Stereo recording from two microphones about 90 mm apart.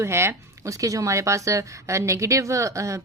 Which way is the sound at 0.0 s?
30° right (ahead or behind).